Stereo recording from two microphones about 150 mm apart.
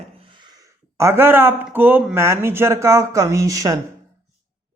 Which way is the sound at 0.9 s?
15° right (ahead or behind).